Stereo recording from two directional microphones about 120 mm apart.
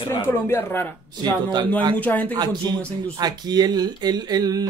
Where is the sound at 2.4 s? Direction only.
35° right (ahead or behind).